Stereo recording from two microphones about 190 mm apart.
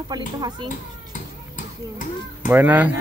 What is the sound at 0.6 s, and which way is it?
Children playing, 45° left (ahead or behind).